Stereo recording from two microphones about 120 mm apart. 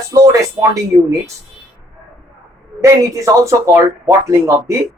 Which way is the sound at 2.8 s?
25° right (ahead or behind).